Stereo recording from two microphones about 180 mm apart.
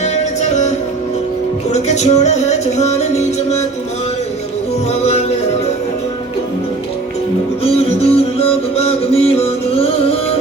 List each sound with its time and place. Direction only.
0.0 s music: 40° left (ahead or behind)
1.7 s music: 40° left (ahead or behind)
7.6 s music: 35° left (ahead or behind)